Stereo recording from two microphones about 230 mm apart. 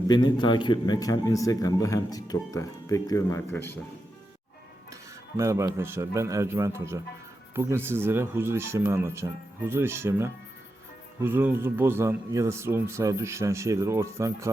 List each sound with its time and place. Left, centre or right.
0.1 s a man's voice: centre
5.4 s speech: centre